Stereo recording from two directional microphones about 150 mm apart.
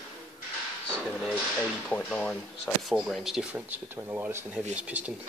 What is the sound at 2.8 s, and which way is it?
Speech, centre (ahead or behind).